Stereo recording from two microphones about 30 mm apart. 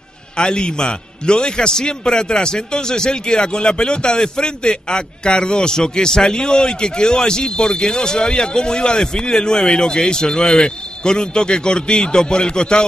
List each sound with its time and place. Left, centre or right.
0.4 s a man's voice: left